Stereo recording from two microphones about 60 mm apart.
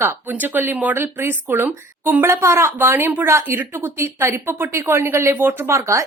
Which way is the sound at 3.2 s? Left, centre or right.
Right.